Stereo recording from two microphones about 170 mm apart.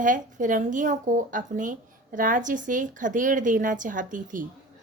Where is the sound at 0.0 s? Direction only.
50° right (ahead or behind).